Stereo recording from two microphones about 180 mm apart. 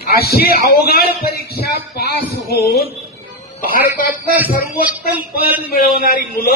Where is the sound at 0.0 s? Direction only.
60° left (ahead or behind).